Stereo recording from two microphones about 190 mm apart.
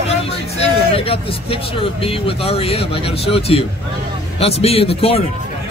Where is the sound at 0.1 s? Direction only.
30° left (ahead or behind).